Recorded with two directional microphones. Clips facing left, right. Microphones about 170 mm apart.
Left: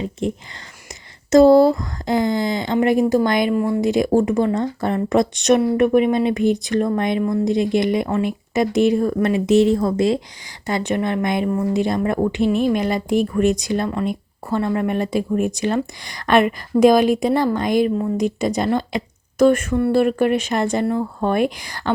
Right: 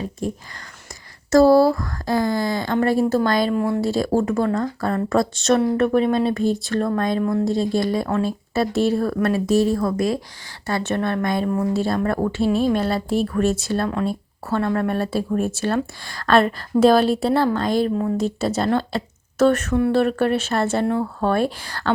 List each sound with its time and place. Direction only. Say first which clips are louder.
0.0 s speech: left 3 dB; 20° left (ahead or behind)
3.5 s speech: left 2 dB; 5° left (ahead or behind)
3.8 s speech: left 3 dB; 15° left (ahead or behind)